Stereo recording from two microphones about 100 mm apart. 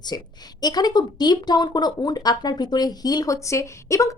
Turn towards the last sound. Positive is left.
turn(degrees=30)  # may be behind; listen again after turning